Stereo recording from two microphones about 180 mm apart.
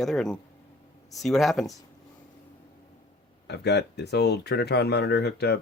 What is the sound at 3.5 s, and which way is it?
Speech, 70° left (ahead or behind).